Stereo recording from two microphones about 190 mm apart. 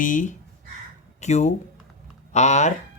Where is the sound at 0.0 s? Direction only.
45° left (ahead or behind).